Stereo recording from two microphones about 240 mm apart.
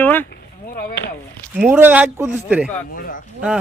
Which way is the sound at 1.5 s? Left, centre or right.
Centre.